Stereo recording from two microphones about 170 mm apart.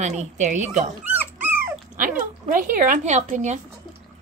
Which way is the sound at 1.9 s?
50° right (ahead or behind).